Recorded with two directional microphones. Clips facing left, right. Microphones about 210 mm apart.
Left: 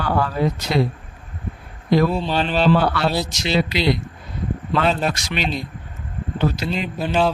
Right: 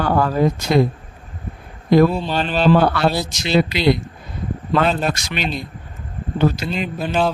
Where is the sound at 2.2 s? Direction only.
10° right (ahead or behind).